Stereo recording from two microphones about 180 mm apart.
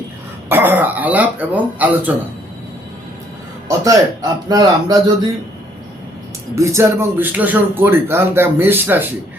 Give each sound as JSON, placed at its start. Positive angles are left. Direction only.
{"t": 0.4, "sound": "speech", "side_deg": -10}
{"t": 3.7, "sound": "speech", "side_deg": -20}
{"t": 6.6, "sound": "speech", "side_deg": -15}